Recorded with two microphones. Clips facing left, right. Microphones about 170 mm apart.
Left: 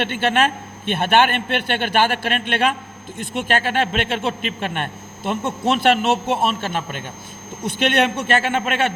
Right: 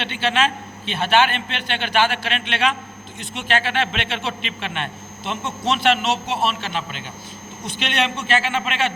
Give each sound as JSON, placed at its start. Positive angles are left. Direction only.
{"t": 0.0, "sound": "a man's voice", "side_deg": 50}